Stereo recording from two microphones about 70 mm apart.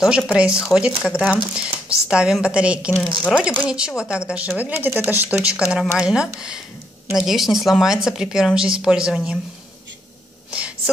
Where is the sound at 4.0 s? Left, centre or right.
Centre.